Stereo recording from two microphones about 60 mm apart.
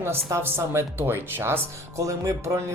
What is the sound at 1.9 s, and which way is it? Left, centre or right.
Speech, right.